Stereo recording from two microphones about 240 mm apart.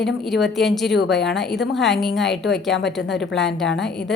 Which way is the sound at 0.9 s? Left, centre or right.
Left.